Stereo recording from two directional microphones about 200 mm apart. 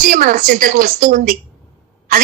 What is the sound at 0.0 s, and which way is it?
A woman's voice, 45° right (ahead or behind).